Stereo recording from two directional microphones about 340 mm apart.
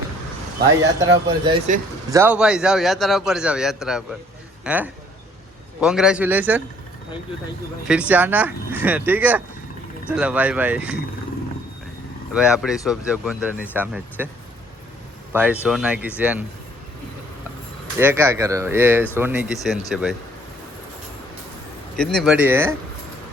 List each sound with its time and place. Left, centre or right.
1.5 s speech: centre
2.0 s a man's voice: centre
7.9 s a man's voice: centre
12.3 s a man's voice: centre
15.3 s a man's voice: centre
17.9 s a man's voice: centre
21.9 s a man's voice: centre